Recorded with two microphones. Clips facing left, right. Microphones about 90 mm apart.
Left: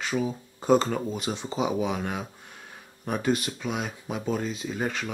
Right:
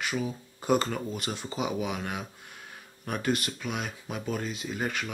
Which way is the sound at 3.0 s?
5° left (ahead or behind).